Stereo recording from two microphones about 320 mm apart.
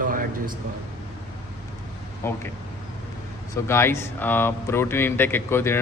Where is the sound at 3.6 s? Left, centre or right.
Centre.